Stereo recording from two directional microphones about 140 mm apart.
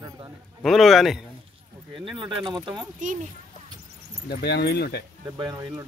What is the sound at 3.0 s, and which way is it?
Speech, 65° right (ahead or behind).